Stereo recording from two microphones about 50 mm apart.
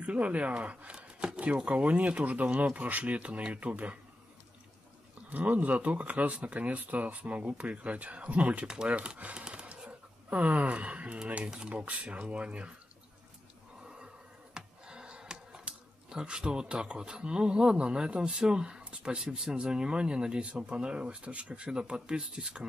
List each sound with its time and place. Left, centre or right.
0.0 s speech: right
5.3 s speech: right
8.8 s a sound: right
11.2 s speech: right
14.5 s speech: centre
21.6 s speech: centre